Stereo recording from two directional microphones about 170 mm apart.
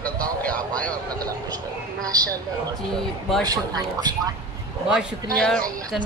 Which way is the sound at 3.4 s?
20° right (ahead or behind).